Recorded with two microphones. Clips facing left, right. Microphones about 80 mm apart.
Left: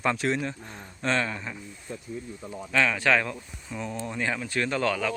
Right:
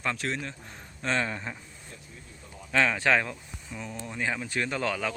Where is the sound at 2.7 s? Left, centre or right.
Right.